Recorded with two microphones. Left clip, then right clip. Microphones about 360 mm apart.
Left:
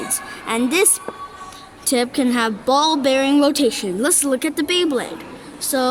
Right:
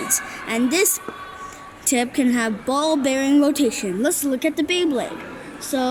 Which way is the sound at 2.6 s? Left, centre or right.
Left.